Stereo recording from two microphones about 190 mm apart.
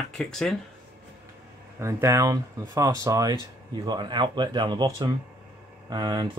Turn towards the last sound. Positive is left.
turn(degrees=-25)  # may be behind; listen again after turning